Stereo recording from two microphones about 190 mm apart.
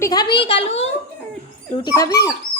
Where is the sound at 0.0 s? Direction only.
20° left (ahead or behind).